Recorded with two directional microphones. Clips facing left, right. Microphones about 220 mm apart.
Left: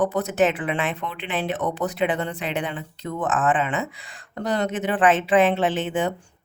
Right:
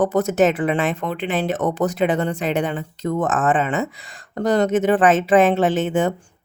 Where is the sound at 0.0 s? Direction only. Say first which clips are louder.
Right 4 dB; 45° right (ahead or behind).